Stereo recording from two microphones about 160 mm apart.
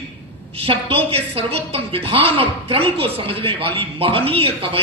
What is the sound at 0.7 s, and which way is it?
Speech, 35° right (ahead or behind).